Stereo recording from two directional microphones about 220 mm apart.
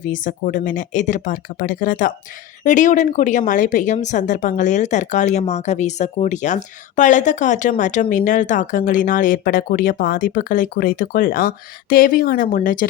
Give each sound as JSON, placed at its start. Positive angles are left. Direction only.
{"t": 0.1, "sound": "speech", "side_deg": 35}